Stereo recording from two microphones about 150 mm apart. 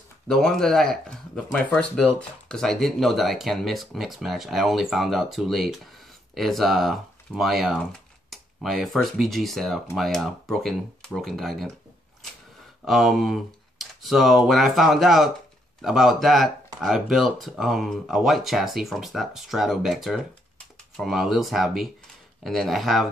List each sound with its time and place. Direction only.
0.3 s speech: 5° left (ahead or behind)
12.8 s speech: centre (ahead or behind)